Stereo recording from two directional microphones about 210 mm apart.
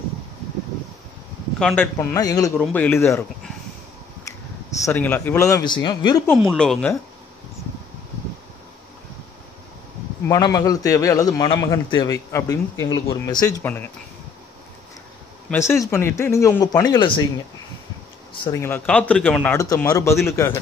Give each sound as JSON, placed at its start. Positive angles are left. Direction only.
{"t": 1.6, "sound": "a man's voice", "side_deg": 5}
{"t": 4.8, "sound": "a man's voice", "side_deg": 10}
{"t": 6.5, "sound": "speech", "side_deg": 5}
{"t": 10.2, "sound": "a man's voice", "side_deg": 15}
{"t": 15.5, "sound": "a man's voice", "side_deg": 10}
{"t": 18.4, "sound": "a man's voice", "side_deg": 15}